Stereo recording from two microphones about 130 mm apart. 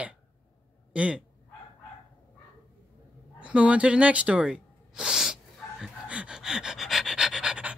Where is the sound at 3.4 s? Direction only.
10° right (ahead or behind).